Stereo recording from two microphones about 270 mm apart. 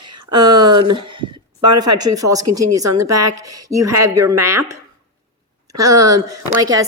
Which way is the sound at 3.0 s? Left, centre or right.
Right.